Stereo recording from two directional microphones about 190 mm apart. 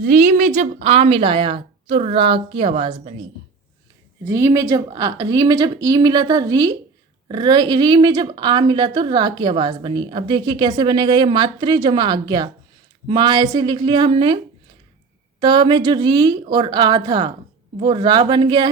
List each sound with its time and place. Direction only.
0.0 s a woman's voice: 45° right (ahead or behind); by 3.2 s 30° right (ahead or behind)
4.3 s a woman's voice: 15° right (ahead or behind)
15.4 s a woman's voice: 25° right (ahead or behind)